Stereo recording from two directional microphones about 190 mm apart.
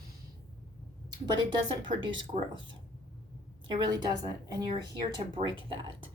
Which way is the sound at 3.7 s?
25° right (ahead or behind).